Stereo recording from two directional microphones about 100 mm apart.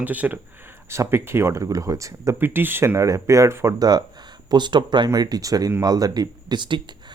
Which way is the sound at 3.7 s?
40° right (ahead or behind).